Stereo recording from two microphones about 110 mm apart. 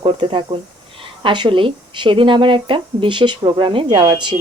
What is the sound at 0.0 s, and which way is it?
Speech, 55° right (ahead or behind).